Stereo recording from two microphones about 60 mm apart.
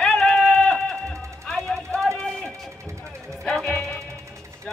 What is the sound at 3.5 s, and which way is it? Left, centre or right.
Music, centre.